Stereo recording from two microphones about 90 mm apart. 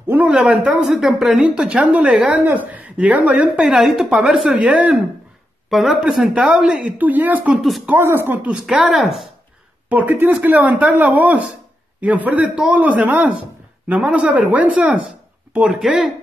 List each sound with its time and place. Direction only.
0.1 s a woman's voice: 15° right (ahead or behind)
5.7 s a woman's voice: centre (ahead or behind); by 7.6 s 15° right (ahead or behind)
7.6 s speech: centre (ahead or behind)
7.9 s speech: 25° right (ahead or behind)
8.6 s speech: 5° right (ahead or behind)
9.8 s a woman's voice: 15° right (ahead or behind)